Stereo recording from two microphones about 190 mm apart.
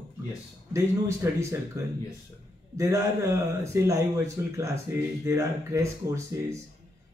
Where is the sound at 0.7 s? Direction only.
15° right (ahead or behind).